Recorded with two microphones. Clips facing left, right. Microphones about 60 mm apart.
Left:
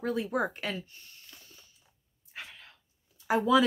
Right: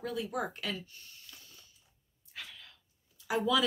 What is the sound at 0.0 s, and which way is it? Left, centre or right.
Speech, left.